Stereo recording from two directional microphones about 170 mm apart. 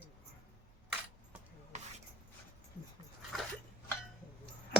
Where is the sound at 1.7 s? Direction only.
40° right (ahead or behind).